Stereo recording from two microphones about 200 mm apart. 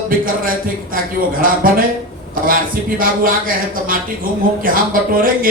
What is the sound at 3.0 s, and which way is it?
Speech, 45° right (ahead or behind).